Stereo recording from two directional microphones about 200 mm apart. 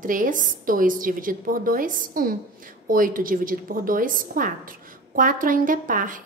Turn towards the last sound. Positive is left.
turn(degrees=-40)  # may be behind; listen again after turning